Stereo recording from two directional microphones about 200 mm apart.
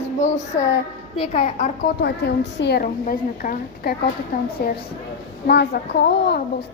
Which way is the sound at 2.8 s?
40° left (ahead or behind).